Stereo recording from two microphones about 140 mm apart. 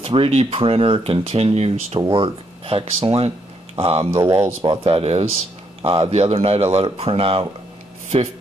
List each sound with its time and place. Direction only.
0.0 s speech: 40° right (ahead or behind)
2.0 s speech: 35° right (ahead or behind)
4.1 s speech: 20° right (ahead or behind)
4.6 s speech: 45° right (ahead or behind)